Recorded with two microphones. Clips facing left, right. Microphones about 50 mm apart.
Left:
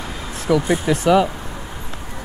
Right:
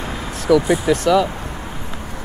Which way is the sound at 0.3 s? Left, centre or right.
Centre.